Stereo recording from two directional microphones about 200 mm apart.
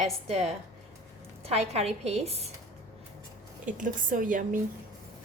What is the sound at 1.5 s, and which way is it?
Speech, 30° right (ahead or behind).